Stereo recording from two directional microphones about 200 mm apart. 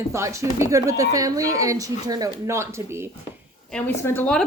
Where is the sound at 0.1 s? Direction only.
15° right (ahead or behind).